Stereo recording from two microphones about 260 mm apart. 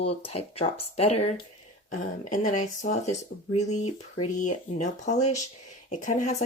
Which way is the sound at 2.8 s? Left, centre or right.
Left.